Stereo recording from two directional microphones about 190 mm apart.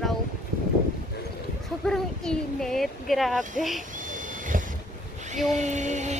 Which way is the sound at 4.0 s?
45° right (ahead or behind).